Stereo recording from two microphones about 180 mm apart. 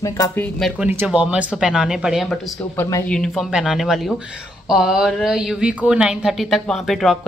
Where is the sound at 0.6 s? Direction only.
Centre (ahead or behind).